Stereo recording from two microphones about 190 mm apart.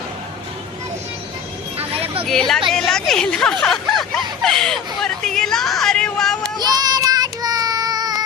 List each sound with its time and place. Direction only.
1.8 s a sound: 30° right (ahead or behind)
2.2 s a woman's voice: centre (ahead or behind)
6.6 s child singing: 20° right (ahead or behind)